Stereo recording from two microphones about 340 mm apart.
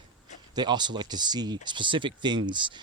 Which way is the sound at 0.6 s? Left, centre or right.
Centre.